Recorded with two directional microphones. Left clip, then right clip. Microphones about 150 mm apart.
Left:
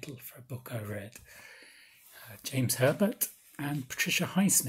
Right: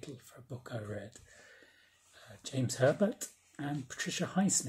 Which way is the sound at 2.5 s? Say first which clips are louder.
Left 2 dB; 10° left (ahead or behind).